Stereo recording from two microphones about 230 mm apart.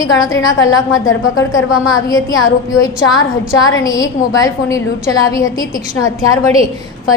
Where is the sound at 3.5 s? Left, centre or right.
Centre.